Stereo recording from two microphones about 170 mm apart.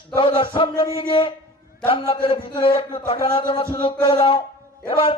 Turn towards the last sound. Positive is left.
turn(degrees=35)  # may be behind; listen again after turning